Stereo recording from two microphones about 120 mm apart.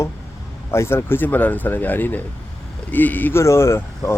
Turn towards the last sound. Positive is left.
turn(degrees=20)  # may be behind; listen again after turning